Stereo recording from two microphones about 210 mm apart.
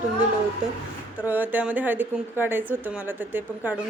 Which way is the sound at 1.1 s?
10° right (ahead or behind).